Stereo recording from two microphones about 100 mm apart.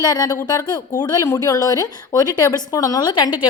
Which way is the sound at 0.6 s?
40° left (ahead or behind).